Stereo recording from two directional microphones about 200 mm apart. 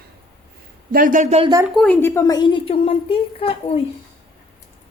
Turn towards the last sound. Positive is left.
turn(degrees=30)  # may be behind; listen again after turning